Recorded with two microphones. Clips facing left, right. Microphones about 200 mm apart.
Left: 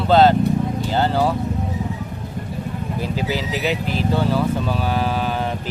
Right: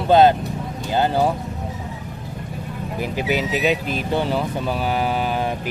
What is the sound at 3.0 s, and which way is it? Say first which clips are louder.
Speech: right 2 dB; 15° right (ahead or behind).